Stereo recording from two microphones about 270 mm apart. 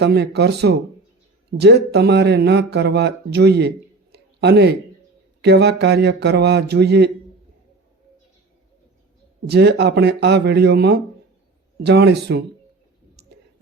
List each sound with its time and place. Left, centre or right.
0.0 s speech: right
9.5 s speech: right